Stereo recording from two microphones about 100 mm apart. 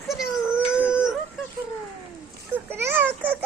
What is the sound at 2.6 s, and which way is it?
Speech, 25° right (ahead or behind).